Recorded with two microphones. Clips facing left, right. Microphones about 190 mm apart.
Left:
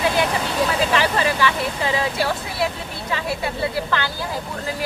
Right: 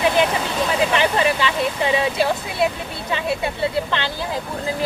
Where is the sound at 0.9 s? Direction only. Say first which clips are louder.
Right 2 dB; 20° right (ahead or behind).